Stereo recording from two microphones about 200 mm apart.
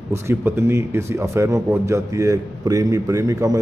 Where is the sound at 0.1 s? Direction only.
10° right (ahead or behind).